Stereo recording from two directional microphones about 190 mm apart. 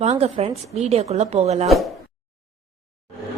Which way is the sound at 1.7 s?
Centre (ahead or behind).